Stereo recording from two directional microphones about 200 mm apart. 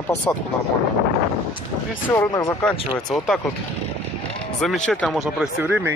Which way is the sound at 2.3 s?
20° left (ahead or behind).